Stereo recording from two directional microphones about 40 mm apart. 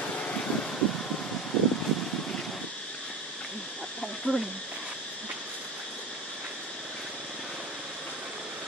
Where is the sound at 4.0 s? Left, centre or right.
Centre.